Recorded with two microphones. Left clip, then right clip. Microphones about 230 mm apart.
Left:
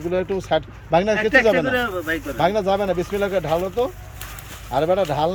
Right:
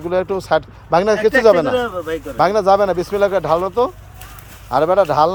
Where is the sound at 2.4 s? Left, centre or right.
Centre.